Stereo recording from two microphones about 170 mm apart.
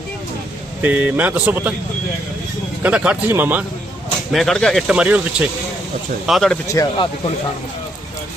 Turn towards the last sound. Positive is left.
turn(degrees=20)  # may be behind; listen again after turning